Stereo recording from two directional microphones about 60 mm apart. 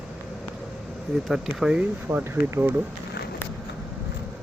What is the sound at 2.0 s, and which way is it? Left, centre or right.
Speech, right.